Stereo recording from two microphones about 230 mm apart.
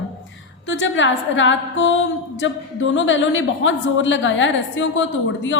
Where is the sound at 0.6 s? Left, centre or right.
Left.